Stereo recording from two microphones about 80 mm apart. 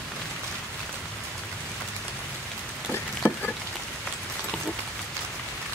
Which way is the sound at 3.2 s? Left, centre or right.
Left.